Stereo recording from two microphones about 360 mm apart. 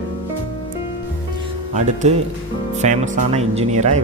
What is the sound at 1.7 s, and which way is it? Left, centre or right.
Speech, centre.